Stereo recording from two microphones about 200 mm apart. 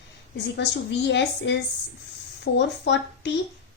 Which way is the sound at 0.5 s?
60° left (ahead or behind).